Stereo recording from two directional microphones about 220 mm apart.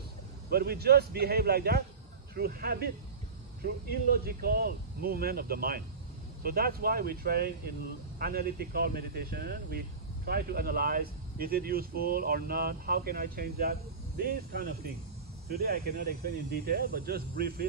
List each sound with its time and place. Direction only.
0.5 s speech: 45° right (ahead or behind)
4.2 s speech: 40° right (ahead or behind)